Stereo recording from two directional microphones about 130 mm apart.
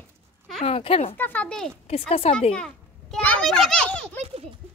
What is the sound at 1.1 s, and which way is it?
Speech, 15° left (ahead or behind).